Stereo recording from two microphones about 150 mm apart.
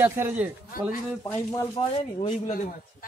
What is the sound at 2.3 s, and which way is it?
Speech, 55° left (ahead or behind).